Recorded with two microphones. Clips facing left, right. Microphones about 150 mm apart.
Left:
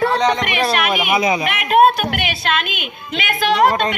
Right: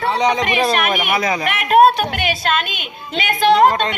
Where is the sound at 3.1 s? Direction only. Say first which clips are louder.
Right 4 dB; 40° right (ahead or behind).